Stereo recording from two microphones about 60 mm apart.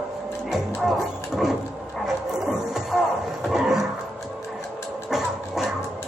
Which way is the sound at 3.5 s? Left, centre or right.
Centre.